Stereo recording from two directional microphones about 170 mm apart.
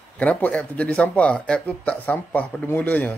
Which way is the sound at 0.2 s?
10° left (ahead or behind).